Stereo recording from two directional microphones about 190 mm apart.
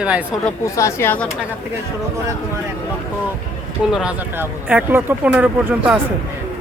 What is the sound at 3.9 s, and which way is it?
Speech, 5° right (ahead or behind).